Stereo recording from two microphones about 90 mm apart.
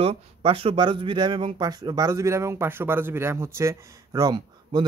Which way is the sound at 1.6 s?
50° right (ahead or behind).